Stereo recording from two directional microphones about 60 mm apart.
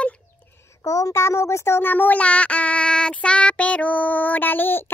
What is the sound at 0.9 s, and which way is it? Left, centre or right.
Speech, left.